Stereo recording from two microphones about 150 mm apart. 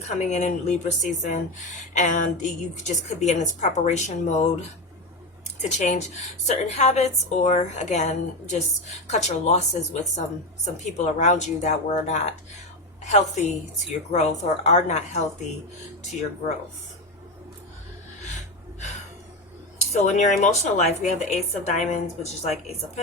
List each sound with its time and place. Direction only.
0.0 s a woman's voice: 50° left (ahead or behind)
5.5 s a woman's voice: 50° left (ahead or behind)
13.4 s a woman's voice: 50° left (ahead or behind)
19.8 s a woman's voice: 45° left (ahead or behind)